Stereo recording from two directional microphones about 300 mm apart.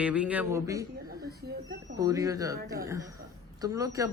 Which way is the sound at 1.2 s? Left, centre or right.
Right.